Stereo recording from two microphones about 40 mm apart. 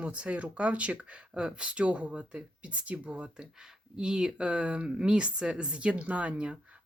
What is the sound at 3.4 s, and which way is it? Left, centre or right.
Speech, centre.